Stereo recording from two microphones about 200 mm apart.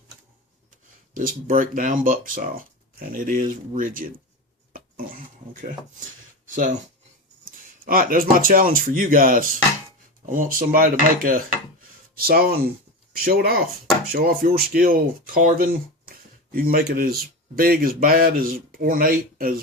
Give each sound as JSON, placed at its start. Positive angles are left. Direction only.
{"t": 1.1, "sound": "speech", "side_deg": -45}
{"t": 4.7, "sound": "a sound", "side_deg": -45}
{"t": 7.4, "sound": "speech", "side_deg": -45}